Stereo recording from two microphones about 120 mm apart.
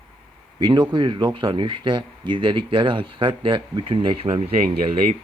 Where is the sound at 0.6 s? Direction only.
40° right (ahead or behind).